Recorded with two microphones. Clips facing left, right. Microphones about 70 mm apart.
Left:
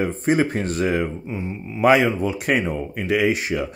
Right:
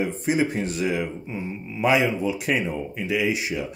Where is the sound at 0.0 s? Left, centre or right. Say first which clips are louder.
Left 3 dB; left.